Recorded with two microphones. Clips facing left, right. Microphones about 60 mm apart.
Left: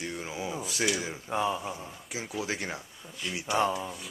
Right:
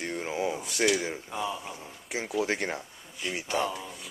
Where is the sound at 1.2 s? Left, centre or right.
Left.